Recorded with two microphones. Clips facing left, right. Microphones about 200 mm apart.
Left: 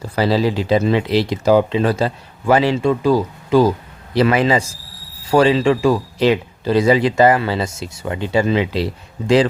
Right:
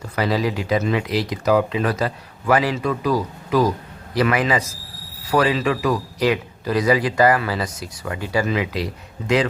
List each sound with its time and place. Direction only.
0.2 s speech: 30° left (ahead or behind)